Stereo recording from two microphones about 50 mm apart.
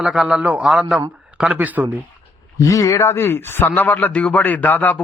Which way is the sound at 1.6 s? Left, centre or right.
Right.